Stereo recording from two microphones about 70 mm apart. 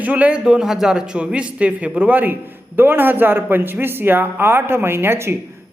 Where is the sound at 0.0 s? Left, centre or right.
Right.